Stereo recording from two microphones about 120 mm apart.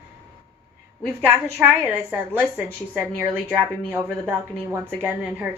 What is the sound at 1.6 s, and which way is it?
A woman's voice, 15° right (ahead or behind).